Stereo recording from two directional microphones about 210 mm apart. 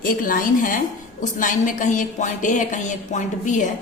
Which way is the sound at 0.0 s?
40° left (ahead or behind).